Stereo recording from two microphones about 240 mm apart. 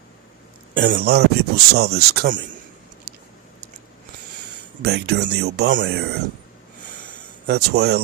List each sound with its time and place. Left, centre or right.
0.8 s speech: right
4.8 s speech: right
7.4 s speech: right